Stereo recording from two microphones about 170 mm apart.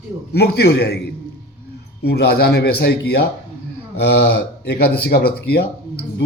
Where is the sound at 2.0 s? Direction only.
70° left (ahead or behind).